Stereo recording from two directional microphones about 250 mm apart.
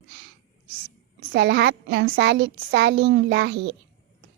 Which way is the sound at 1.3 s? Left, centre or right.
Right.